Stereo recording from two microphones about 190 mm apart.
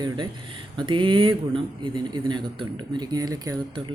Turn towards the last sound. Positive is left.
turn(degrees=-20)  # may be behind; listen again after turning